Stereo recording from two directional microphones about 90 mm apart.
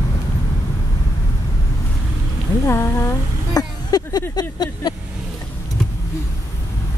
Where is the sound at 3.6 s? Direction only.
45° left (ahead or behind).